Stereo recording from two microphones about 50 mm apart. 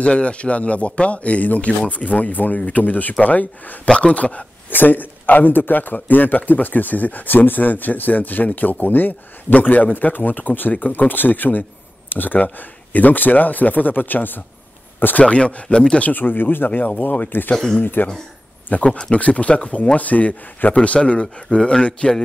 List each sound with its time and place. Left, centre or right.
0.0 s a man's voice: left
3.8 s speech: centre
4.6 s a man's voice: left
15.2 s speech: left
16.1 s a man's voice: left
18.0 s a man's voice: left
18.9 s speech: centre
19.1 s speech: left